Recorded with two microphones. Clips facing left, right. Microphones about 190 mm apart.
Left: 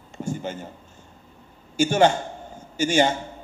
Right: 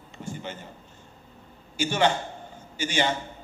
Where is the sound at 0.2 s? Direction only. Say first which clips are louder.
Left 7 dB; 45° left (ahead or behind).